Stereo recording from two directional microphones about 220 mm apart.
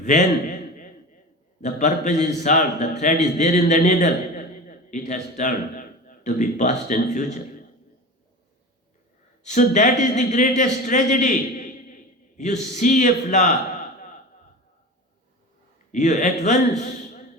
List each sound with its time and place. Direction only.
0.0 s a man's voice: 35° left (ahead or behind)
1.6 s a man's voice: 35° left (ahead or behind)
9.4 s a man's voice: 35° left (ahead or behind)
15.9 s a man's voice: 35° left (ahead or behind)